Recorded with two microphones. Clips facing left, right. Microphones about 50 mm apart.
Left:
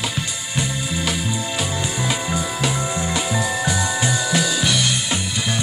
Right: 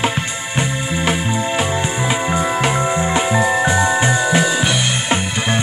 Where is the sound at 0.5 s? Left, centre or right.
Right.